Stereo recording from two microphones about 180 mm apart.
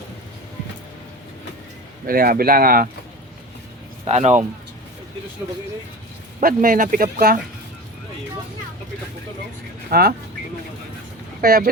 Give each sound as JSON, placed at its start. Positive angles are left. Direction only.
{"t": 2.0, "sound": "speech", "side_deg": -55}
{"t": 4.0, "sound": "speech", "side_deg": -40}
{"t": 6.4, "sound": "speech", "side_deg": -50}
{"t": 9.9, "sound": "speech", "side_deg": -55}
{"t": 11.3, "sound": "speech", "side_deg": -55}